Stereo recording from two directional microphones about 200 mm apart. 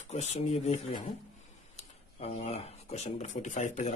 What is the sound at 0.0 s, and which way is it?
Speech, 35° left (ahead or behind).